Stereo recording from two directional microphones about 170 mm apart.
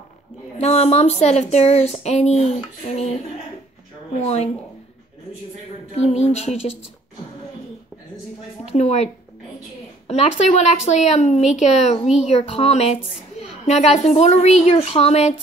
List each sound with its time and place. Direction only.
0.6 s speech: 40° left (ahead or behind)
4.2 s speech: 40° left (ahead or behind)
5.9 s speech: 40° left (ahead or behind)
8.7 s speech: 40° left (ahead or behind)